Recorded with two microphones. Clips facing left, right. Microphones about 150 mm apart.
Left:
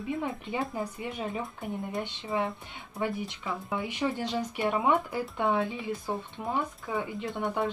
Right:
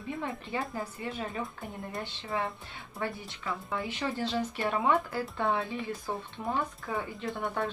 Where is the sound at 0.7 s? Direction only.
15° left (ahead or behind).